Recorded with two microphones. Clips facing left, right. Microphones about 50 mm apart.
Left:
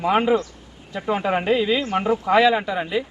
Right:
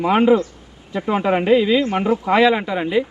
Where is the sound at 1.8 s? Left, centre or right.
Right.